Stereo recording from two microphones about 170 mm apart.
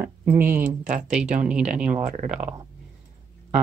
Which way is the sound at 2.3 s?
5° right (ahead or behind).